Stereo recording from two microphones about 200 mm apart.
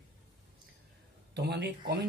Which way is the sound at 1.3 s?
55° right (ahead or behind).